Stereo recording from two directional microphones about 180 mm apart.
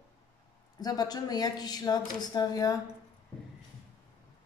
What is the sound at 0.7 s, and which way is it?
A woman's voice, 20° left (ahead or behind).